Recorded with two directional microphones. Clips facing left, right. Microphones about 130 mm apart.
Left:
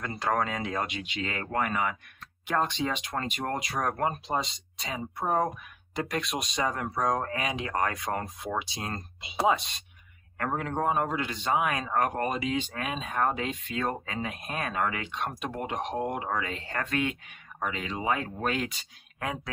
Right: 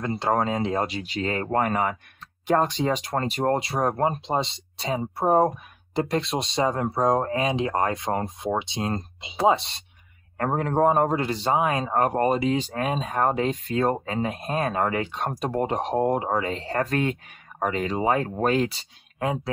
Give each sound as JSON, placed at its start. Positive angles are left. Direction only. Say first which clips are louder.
{"t": 0.0, "sound": "a man's voice", "louder": "right 5 dB", "side_deg": -25}